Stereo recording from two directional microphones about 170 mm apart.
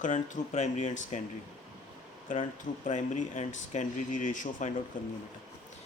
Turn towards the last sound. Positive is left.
turn(degrees=50)  # may be behind; listen again after turning